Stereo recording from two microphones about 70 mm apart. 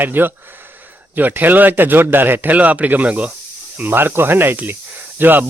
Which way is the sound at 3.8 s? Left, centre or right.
Right.